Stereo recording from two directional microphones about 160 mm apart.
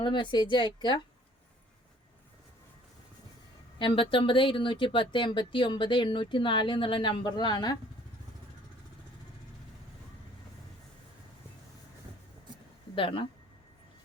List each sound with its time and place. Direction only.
0.0 s speech: 30° left (ahead or behind)
3.8 s speech: 30° left (ahead or behind)
13.0 s speech: 35° left (ahead or behind)